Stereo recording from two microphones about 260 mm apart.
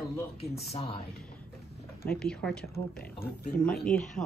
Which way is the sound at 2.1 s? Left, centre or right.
Centre.